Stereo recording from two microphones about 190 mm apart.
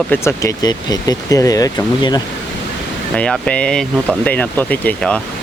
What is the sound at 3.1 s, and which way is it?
Speech, 5° left (ahead or behind).